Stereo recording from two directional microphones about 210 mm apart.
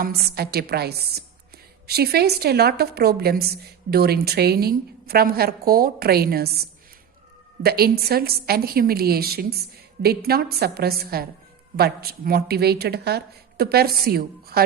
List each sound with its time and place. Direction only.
0.0 s a woman's voice: 45° right (ahead or behind)
7.6 s a woman's voice: 45° right (ahead or behind)